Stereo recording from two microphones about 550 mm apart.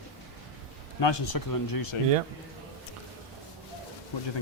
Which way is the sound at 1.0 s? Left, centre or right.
Left.